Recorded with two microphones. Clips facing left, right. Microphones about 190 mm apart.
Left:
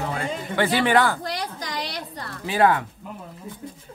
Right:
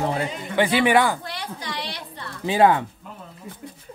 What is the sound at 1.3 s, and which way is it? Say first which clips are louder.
Speech: left 2 dB; 40° left (ahead or behind).